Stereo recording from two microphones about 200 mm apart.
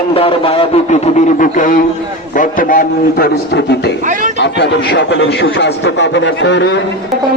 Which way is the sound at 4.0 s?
40° right (ahead or behind).